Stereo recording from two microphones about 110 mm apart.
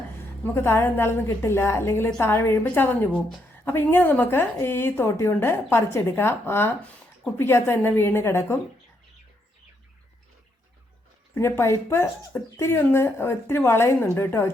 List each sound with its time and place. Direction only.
0.4 s a woman's voice: 20° left (ahead or behind)
11.3 s a woman's voice: 25° left (ahead or behind)